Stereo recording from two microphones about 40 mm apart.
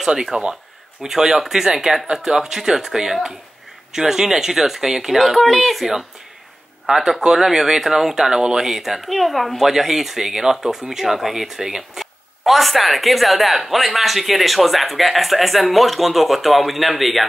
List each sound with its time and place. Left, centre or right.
0.0 s a woman's voice: centre